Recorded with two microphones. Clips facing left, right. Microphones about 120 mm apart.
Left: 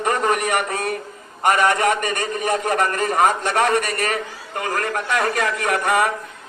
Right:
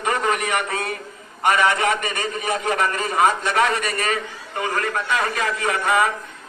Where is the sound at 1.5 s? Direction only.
50° left (ahead or behind).